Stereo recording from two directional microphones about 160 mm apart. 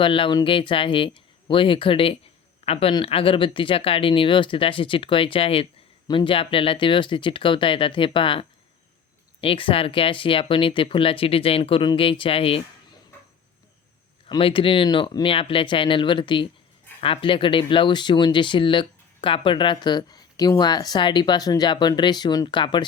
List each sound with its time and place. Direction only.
0.0 s speech: 30° left (ahead or behind)
14.3 s speech: 35° left (ahead or behind)